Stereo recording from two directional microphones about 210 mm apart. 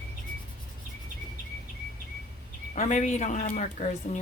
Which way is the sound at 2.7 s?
35° left (ahead or behind).